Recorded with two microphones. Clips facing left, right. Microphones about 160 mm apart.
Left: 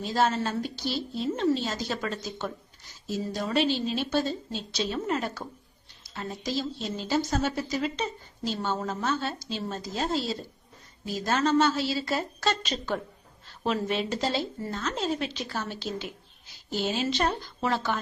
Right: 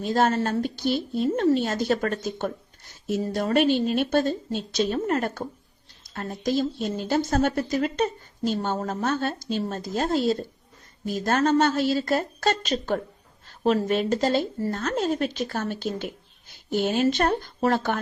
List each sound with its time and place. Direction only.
0.0 s a woman's voice: 50° right (ahead or behind)